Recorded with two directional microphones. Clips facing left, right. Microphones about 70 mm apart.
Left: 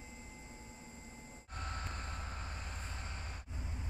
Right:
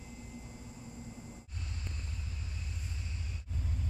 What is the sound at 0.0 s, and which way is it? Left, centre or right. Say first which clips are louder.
Vehicle: right 4 dB; left.